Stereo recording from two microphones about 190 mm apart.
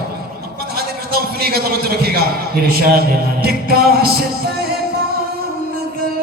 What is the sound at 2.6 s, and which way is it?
Music, 55° right (ahead or behind).